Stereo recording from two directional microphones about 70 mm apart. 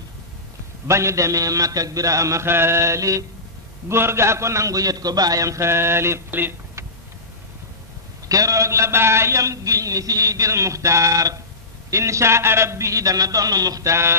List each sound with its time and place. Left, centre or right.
0.8 s a man's voice: right
3.9 s a man's voice: right
8.3 s a man's voice: right